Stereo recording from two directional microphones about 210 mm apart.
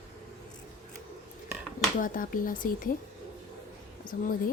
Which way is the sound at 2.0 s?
40° left (ahead or behind).